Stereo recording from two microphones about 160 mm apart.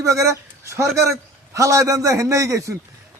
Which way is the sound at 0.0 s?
20° right (ahead or behind).